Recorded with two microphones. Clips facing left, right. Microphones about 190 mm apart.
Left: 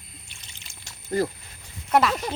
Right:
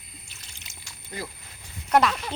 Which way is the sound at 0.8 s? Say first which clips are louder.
Left 12 dB; 45° left (ahead or behind).